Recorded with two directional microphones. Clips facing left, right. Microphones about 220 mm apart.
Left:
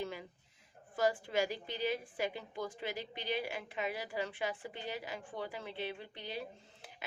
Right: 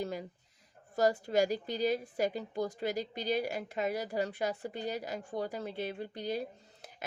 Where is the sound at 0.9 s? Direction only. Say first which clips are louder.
Right 5 dB; 40° right (ahead or behind).